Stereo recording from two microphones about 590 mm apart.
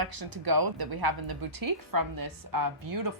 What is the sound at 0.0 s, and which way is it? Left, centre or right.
Speech, right.